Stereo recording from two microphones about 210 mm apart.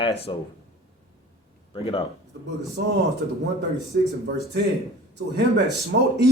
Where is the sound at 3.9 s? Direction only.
55° right (ahead or behind).